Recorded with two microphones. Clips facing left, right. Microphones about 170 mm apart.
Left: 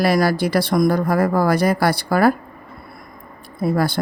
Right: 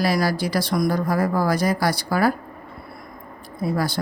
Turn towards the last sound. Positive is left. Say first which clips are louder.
# left 4 dB
turn(degrees=55)  # may be behind; listen again after turning